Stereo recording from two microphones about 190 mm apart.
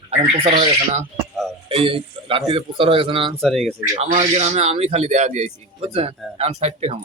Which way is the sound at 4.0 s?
35° right (ahead or behind).